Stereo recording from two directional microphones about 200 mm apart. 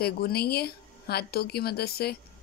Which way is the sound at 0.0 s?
50° left (ahead or behind).